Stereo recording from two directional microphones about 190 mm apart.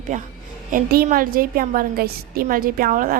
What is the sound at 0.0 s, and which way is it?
A woman's voice, 40° right (ahead or behind).